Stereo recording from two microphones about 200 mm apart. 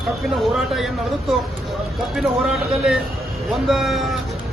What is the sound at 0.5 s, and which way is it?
Speech, centre (ahead or behind).